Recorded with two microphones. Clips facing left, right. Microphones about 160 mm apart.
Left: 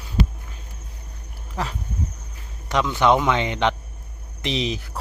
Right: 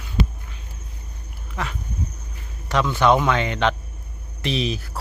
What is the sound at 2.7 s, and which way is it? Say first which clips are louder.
Speech: right 1 dB; 15° left (ahead or behind).